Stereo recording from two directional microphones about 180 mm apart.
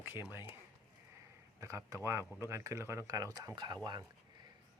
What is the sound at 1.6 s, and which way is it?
Speech, 15° right (ahead or behind).